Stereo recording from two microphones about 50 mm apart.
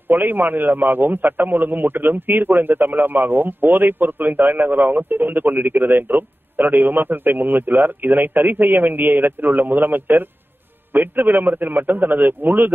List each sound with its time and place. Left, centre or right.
0.1 s a man's voice: right